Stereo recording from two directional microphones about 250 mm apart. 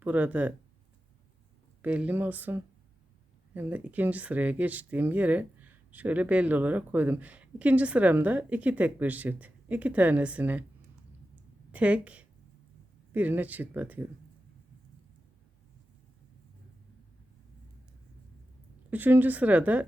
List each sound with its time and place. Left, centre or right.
0.0 s speech: centre
1.8 s speech: centre
11.3 s a sound: centre
13.1 s speech: centre
18.9 s speech: centre